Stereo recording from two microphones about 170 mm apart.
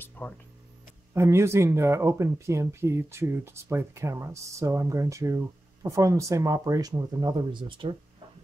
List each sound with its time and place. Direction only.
0.2 s speech: 10° left (ahead or behind)
1.1 s speech: 15° right (ahead or behind)